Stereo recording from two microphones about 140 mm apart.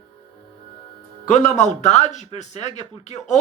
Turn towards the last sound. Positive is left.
turn(degrees=55)  # may be behind; listen again after turning